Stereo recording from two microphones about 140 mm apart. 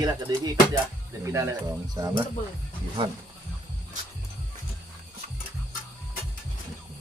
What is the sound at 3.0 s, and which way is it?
Speech, 40° right (ahead or behind).